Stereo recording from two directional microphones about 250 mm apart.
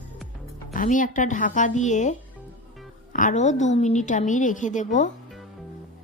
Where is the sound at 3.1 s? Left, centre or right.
Left.